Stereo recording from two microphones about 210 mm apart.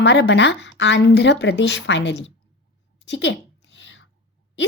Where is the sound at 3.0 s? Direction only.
60° left (ahead or behind).